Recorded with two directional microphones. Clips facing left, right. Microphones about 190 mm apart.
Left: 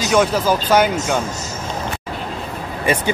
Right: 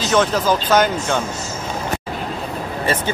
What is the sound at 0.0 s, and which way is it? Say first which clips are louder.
Speech: left 1 dB; 10° left (ahead or behind).